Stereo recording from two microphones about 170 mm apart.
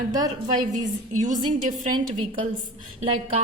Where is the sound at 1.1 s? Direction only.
45° right (ahead or behind).